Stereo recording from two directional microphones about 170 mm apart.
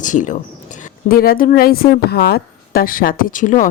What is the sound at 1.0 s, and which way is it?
Speech, 60° left (ahead or behind).